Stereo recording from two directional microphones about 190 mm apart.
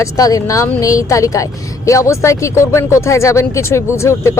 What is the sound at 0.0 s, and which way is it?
Speech, 15° left (ahead or behind).